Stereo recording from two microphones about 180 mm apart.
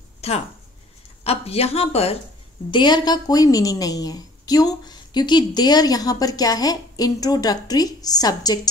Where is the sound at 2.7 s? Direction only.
25° left (ahead or behind).